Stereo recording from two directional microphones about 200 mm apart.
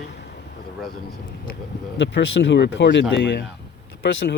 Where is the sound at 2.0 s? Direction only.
65° left (ahead or behind).